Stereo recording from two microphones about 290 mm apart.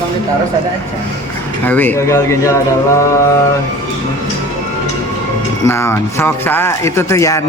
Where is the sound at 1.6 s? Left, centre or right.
Centre.